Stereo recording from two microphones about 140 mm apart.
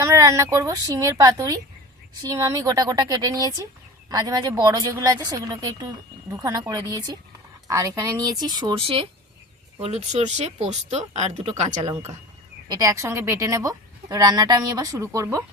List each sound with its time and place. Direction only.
0.0 s a woman's voice: 20° right (ahead or behind)
9.8 s speech: 50° right (ahead or behind)
12.6 s a woman's voice: 25° right (ahead or behind)